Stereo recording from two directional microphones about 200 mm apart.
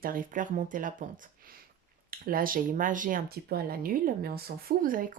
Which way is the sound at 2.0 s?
45° right (ahead or behind).